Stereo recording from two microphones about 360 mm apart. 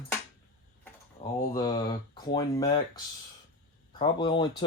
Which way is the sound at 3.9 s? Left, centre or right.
Centre.